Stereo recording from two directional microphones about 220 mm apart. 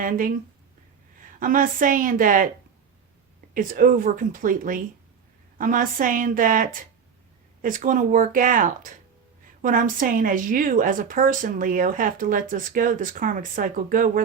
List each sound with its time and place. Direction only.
0.0 s a woman's voice: 40° right (ahead or behind)
3.5 s a woman's voice: 40° right (ahead or behind)